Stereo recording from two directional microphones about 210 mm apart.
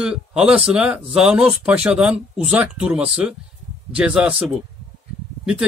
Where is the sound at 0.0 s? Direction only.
5° right (ahead or behind).